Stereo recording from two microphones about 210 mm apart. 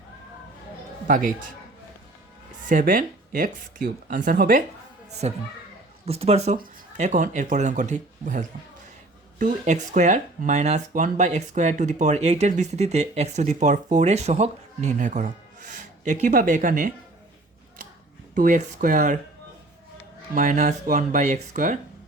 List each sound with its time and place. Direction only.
1.0 s a man's voice: 40° right (ahead or behind)
2.6 s speech: 40° right (ahead or behind)
5.2 s speech: 30° right (ahead or behind)
18.3 s speech: 35° right (ahead or behind)
20.3 s speech: 40° right (ahead or behind)